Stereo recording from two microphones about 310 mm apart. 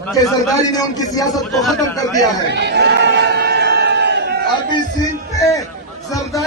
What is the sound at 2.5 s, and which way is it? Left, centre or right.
Crowd, right.